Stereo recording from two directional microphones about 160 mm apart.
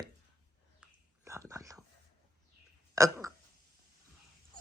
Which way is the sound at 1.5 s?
20° right (ahead or behind).